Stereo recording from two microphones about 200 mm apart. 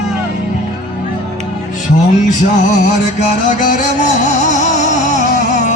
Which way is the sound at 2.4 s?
40° left (ahead or behind).